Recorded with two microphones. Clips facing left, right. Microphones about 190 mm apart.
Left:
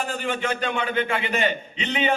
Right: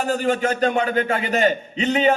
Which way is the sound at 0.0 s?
40° right (ahead or behind).